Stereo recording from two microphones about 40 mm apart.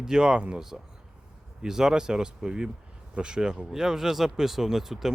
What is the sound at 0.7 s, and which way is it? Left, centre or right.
Speech, centre.